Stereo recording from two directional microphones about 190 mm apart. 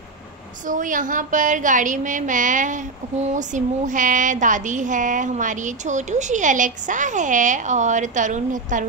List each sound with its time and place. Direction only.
0.7 s a woman's voice: 45° right (ahead or behind)